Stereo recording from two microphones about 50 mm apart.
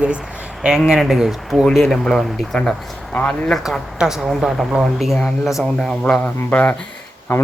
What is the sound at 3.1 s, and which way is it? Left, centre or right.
Speech, left.